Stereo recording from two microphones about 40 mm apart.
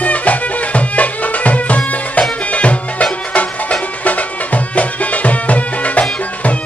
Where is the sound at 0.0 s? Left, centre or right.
Left.